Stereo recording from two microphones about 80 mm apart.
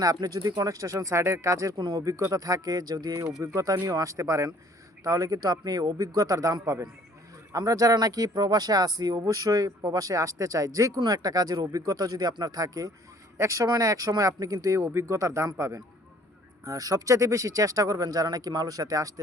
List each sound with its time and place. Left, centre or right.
0.0 s speech: right
8.3 s a man's voice: right